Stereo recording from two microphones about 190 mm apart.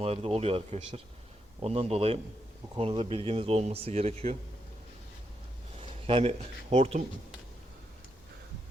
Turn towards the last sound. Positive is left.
turn(degrees=-35)  # may be behind; listen again after turning